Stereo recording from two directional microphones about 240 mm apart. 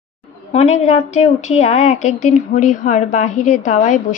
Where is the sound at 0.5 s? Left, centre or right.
Left.